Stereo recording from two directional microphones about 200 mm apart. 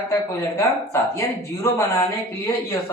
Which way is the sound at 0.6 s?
15° left (ahead or behind).